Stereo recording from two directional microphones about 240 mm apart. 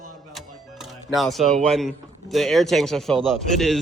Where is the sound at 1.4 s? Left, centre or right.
Right.